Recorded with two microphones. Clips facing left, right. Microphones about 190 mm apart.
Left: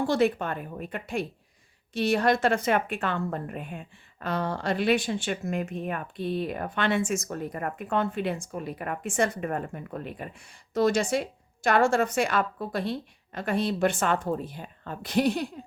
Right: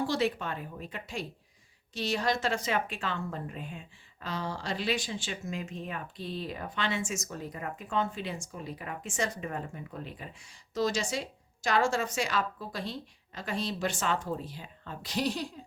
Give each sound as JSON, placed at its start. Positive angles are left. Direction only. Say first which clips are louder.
{"t": 0.1, "sound": "a woman's voice", "louder": "left 6 dB", "side_deg": 55}